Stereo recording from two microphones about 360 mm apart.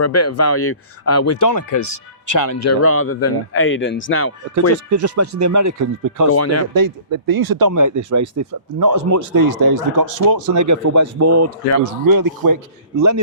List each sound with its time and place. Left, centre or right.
0.0 s speech: left
4.9 s speech: right
6.2 s speech: left
6.7 s speech: right
9.3 s speech: right
10.5 s speech: right
12.0 s speech: right
13.0 s speech: right